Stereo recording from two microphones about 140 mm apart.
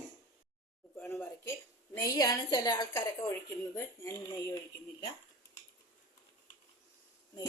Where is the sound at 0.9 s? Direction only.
15° left (ahead or behind).